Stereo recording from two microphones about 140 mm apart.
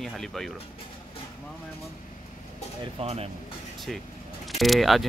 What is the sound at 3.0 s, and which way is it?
Speech, 45° right (ahead or behind).